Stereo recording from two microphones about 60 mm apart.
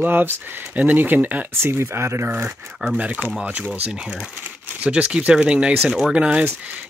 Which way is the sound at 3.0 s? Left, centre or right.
Right.